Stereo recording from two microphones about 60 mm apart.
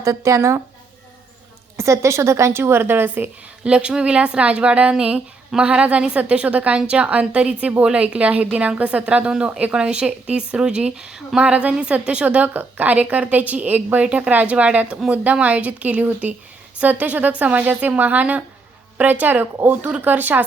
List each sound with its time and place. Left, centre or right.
0.0 s speech: right
1.7 s a woman's voice: right
3.6 s a woman's voice: centre